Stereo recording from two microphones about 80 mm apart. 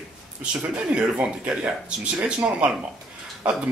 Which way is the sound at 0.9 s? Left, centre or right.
Centre.